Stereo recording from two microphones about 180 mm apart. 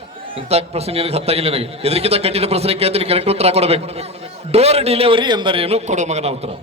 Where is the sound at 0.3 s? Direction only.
35° right (ahead or behind).